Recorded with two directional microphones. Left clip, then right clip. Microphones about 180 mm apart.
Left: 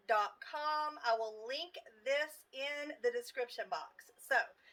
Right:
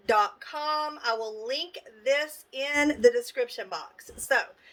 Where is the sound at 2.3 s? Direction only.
55° right (ahead or behind).